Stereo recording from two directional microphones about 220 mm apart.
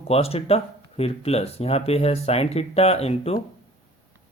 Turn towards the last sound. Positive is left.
turn(degrees=30)  # may be behind; listen again after turning